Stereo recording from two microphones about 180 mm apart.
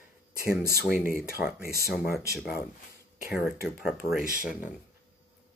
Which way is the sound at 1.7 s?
60° left (ahead or behind).